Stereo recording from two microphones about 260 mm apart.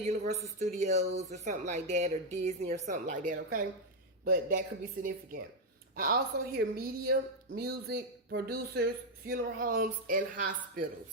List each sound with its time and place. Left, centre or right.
0.0 s speech: right
6.0 s speech: right